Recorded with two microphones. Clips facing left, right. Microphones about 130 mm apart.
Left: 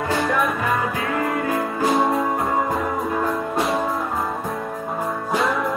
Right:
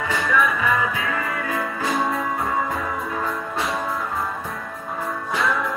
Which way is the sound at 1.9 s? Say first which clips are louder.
Left 4 dB; 25° left (ahead or behind).